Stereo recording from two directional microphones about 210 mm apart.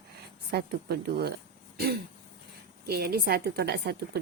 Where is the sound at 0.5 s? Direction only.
45° right (ahead or behind).